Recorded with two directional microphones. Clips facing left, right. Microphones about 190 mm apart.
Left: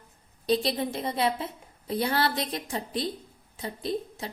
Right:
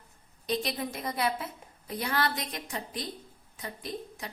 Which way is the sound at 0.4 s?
30° left (ahead or behind).